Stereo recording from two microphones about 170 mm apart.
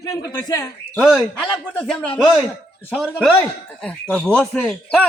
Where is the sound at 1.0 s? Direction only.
Centre (ahead or behind).